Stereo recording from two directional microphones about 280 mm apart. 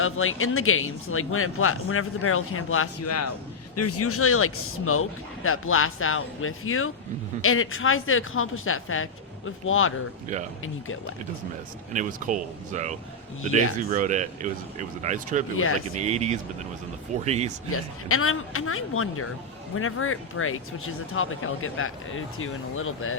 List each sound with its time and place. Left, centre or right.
0.0 s speech: left
11.9 s speech: right
17.7 s speech: left